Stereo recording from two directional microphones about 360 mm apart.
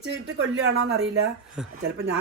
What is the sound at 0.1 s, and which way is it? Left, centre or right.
Speech, right.